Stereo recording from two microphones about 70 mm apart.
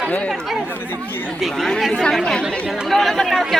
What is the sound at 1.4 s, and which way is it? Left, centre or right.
A woman's voice, centre.